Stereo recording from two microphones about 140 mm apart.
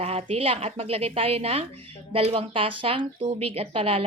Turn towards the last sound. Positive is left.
turn(degrees=-40)  # may be behind; listen again after turning